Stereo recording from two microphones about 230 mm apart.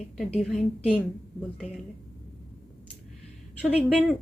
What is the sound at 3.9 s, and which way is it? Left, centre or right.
Speech, centre.